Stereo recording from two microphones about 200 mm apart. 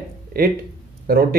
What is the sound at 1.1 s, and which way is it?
Speech, 50° right (ahead or behind).